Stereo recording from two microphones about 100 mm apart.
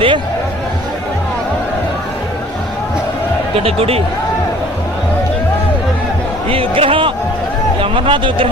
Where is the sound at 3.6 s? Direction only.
75° right (ahead or behind).